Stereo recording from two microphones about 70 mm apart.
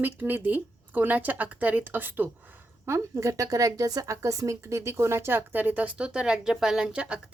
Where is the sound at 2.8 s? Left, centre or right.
Right; by 7.3 s centre.